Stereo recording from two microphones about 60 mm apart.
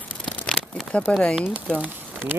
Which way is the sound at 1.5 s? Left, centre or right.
Right.